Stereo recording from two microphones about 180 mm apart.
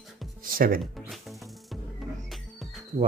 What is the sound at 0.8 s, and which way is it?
Music, centre (ahead or behind).